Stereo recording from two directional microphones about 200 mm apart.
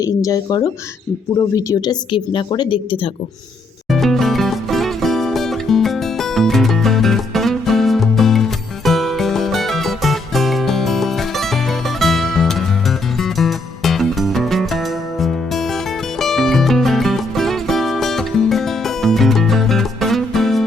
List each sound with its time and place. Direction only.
0.0 s a woman's voice: 15° left (ahead or behind)
3.8 s music: centre (ahead or behind)